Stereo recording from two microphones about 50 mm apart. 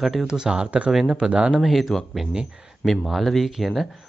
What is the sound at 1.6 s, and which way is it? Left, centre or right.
Speech, centre.